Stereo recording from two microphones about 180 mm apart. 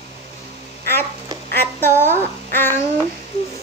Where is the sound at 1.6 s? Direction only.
10° left (ahead or behind).